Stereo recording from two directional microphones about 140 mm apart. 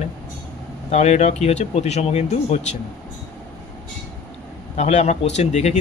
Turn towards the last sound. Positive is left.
turn(degrees=55)  # may be behind; listen again after turning